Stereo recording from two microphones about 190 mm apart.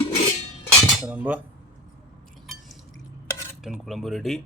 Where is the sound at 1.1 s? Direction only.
5° right (ahead or behind).